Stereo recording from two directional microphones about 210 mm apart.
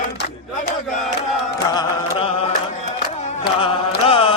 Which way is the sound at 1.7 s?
20° left (ahead or behind).